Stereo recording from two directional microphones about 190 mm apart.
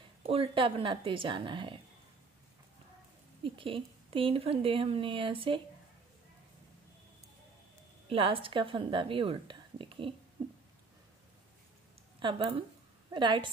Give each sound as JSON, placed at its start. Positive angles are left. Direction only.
{"t": 0.3, "sound": "speech", "side_deg": -30}
{"t": 3.4, "sound": "speech", "side_deg": -25}
{"t": 8.1, "sound": "speech", "side_deg": -30}
{"t": 10.4, "sound": "a sound", "side_deg": -25}
{"t": 12.2, "sound": "speech", "side_deg": -25}